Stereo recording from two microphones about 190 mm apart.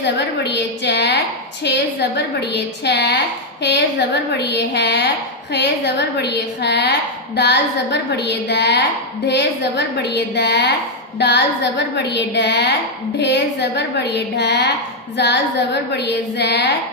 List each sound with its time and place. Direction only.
0.0 s a woman's voice: 65° left (ahead or behind)